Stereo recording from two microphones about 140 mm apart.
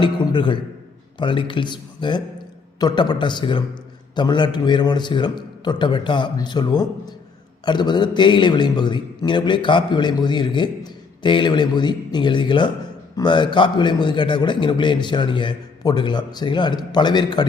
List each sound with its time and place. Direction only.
0.0 s a man's voice: 35° left (ahead or behind)